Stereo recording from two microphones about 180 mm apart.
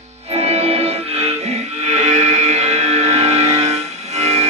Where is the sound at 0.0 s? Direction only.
35° right (ahead or behind).